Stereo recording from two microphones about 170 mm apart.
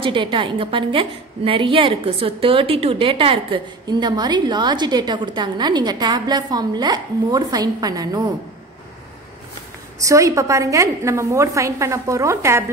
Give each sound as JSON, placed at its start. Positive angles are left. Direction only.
{"t": 0.0, "sound": "a woman's voice", "side_deg": -30}
{"t": 10.0, "sound": "a woman's voice", "side_deg": -20}